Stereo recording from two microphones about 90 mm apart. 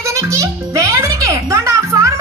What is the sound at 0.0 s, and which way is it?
Music, 35° right (ahead or behind).